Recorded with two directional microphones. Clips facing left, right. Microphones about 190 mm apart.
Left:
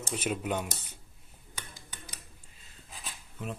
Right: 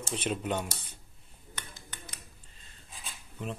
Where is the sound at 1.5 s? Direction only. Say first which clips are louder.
Even; 10° left (ahead or behind).